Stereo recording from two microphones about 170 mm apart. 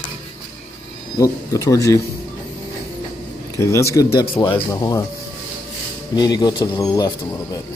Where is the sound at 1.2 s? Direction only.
20° left (ahead or behind).